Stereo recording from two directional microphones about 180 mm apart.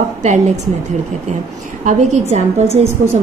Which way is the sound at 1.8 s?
40° right (ahead or behind).